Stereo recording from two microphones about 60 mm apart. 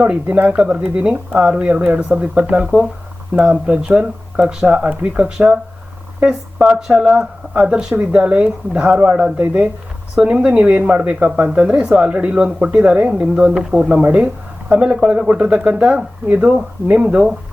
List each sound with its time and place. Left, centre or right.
0.0 s speech: right
14.0 s speech: right